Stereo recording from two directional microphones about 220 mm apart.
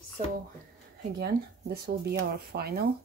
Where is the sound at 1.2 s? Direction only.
45° right (ahead or behind).